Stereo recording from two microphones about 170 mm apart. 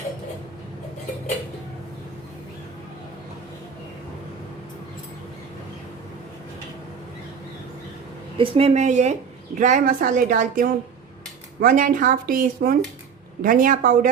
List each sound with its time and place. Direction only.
8.4 s speech: 35° right (ahead or behind); by 14.1 s 55° right (ahead or behind)